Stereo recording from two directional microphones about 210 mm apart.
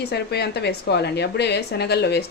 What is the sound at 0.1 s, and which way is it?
Speech, 50° left (ahead or behind).